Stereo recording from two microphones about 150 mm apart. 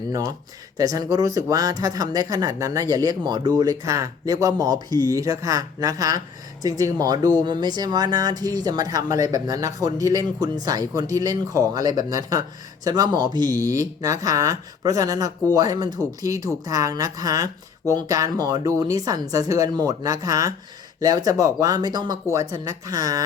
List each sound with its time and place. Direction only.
0.1 s speech: 20° right (ahead or behind)